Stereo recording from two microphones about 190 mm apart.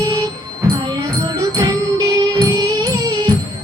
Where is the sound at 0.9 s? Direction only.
20° right (ahead or behind).